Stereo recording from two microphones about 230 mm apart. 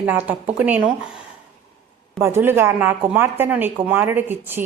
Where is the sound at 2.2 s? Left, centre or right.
Centre.